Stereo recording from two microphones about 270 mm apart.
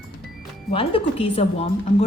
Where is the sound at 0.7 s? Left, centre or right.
Left.